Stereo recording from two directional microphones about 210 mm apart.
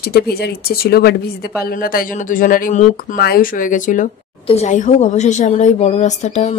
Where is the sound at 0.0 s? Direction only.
45° left (ahead or behind).